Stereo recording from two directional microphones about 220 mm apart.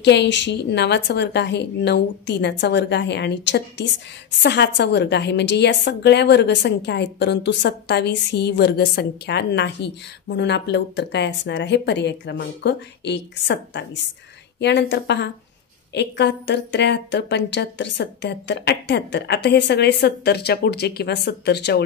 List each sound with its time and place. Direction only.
0.0 s a woman's voice: 50° left (ahead or behind)